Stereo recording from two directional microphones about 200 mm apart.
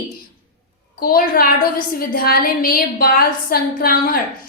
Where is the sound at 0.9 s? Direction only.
45° left (ahead or behind).